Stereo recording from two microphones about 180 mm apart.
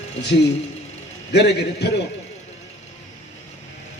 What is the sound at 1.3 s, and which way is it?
Speech, 65° left (ahead or behind).